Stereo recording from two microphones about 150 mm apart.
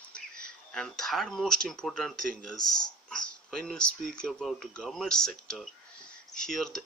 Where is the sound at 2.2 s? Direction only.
65° right (ahead or behind).